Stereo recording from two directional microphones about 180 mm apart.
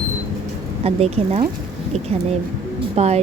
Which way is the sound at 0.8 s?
35° right (ahead or behind).